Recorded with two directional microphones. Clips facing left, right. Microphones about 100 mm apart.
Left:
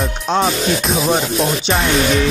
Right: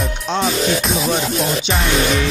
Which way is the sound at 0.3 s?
50° left (ahead or behind).